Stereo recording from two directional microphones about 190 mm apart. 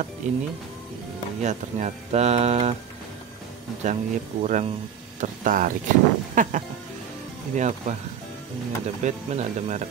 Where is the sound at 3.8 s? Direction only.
40° right (ahead or behind).